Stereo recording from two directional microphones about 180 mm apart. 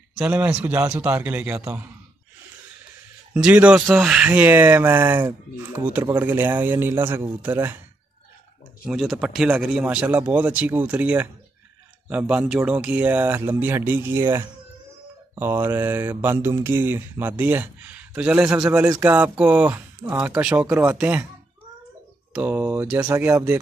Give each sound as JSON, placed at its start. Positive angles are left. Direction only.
{"t": 0.1, "sound": "speech", "side_deg": -10}
{"t": 3.3, "sound": "speech", "side_deg": -5}
{"t": 8.8, "sound": "speech", "side_deg": 0}
{"t": 22.3, "sound": "speech", "side_deg": -10}
{"t": 23.0, "sound": "speech", "side_deg": -15}